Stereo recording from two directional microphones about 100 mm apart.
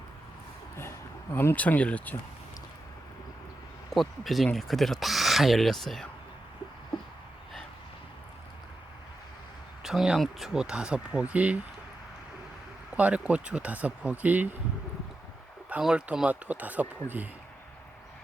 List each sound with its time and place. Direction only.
0.8 s speech: 25° left (ahead or behind)
3.9 s speech: centre (ahead or behind)
9.8 s speech: 5° right (ahead or behind)
13.0 s speech: 15° right (ahead or behind)
15.7 s speech: 10° right (ahead or behind)